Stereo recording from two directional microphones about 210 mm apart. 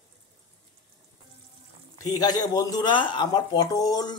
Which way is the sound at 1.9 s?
20° left (ahead or behind).